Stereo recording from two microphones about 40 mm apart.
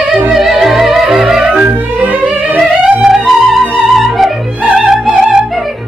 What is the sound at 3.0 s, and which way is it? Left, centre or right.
Music, centre.